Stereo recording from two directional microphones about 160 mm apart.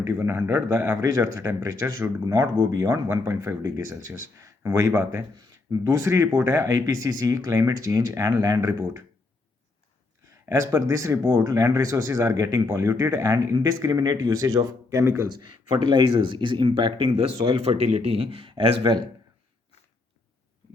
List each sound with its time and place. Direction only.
0.0 s speech: 15° right (ahead or behind)
10.5 s speech: 20° right (ahead or behind)
15.4 s speech: 30° right (ahead or behind)